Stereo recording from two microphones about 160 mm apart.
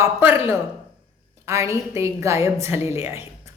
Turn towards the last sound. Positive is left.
turn(degrees=-15)  # may be behind; listen again after turning